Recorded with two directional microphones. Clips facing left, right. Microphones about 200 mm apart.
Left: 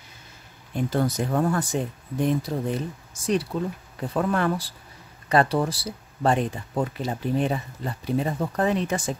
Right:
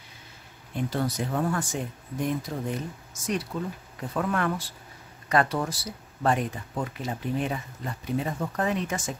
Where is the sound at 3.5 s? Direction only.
35° left (ahead or behind).